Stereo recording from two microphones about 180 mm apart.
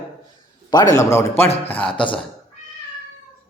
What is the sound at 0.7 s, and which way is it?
A man's voice, 20° left (ahead or behind).